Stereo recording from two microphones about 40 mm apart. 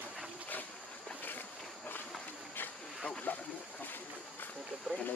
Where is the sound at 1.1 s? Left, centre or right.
Left.